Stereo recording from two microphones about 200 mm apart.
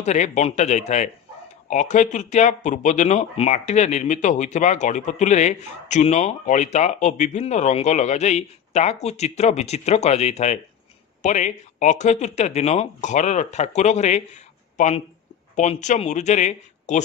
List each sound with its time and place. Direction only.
0.0 s speech: 35° left (ahead or behind)